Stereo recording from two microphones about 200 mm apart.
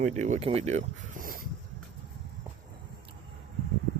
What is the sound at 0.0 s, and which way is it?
Speech, 35° right (ahead or behind).